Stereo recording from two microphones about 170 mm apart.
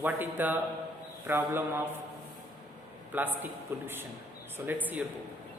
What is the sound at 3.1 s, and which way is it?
Speech, 10° right (ahead or behind).